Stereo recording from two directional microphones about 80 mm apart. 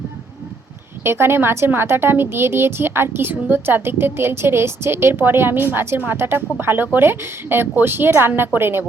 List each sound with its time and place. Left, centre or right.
1.0 s a woman's voice: right